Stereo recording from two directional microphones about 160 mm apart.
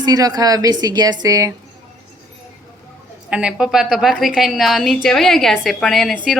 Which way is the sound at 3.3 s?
5° right (ahead or behind).